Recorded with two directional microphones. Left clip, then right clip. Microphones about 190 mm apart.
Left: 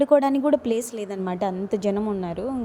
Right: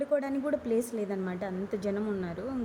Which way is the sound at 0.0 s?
35° left (ahead or behind).